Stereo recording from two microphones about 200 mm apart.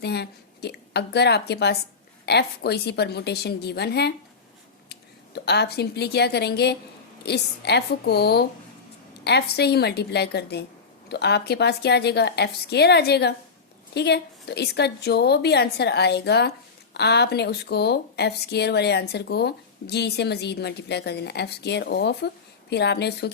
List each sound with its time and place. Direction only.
0.0 s a woman's voice: 55° left (ahead or behind)